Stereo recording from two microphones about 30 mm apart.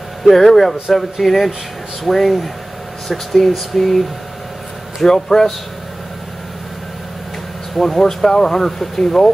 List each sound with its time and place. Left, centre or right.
0.3 s speech: centre
5.0 s speech: centre
7.7 s speech: centre